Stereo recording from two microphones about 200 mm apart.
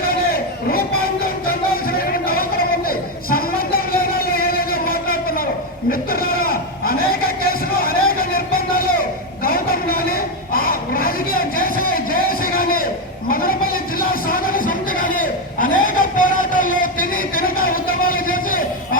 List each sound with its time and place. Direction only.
0.7 s music: 45° left (ahead or behind)
5.9 s a sound: 45° left (ahead or behind)
13.3 s music: 45° left (ahead or behind)